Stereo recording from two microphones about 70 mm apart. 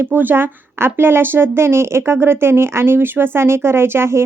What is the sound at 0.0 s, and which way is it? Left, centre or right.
Speech, right.